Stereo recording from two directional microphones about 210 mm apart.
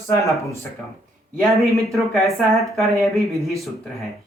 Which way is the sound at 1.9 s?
Centre (ahead or behind).